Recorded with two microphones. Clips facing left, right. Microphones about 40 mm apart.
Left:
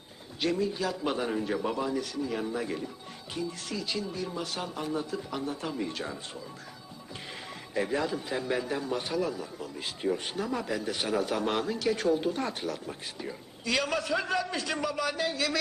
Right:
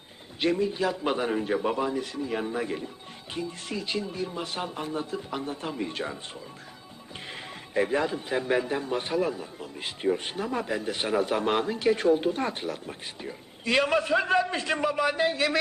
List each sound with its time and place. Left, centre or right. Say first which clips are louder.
0.3 s a man's voice: right 3 dB; right
7.7 s a man's voice: right 4 dB; right